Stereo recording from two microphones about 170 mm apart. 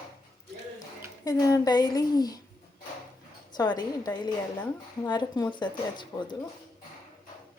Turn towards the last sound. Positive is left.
turn(degrees=25)  # may be behind; listen again after turning